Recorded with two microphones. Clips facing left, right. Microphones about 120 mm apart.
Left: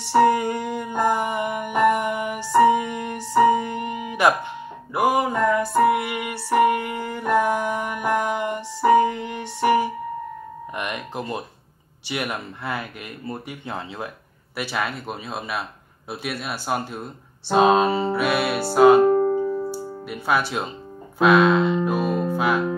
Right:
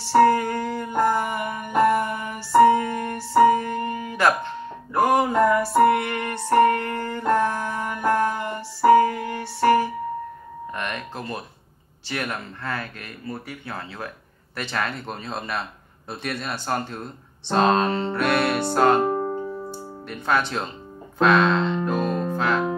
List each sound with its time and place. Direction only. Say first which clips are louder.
0.0 s music: right 1 dB; 15° left (ahead or behind)
5.1 s music: right 5 dB; centre (ahead or behind)
12.1 s speech: left 1 dB; 15° left (ahead or behind)
20.1 s speech: even; 10° left (ahead or behind)
21.2 s music: left 2 dB; 10° left (ahead or behind)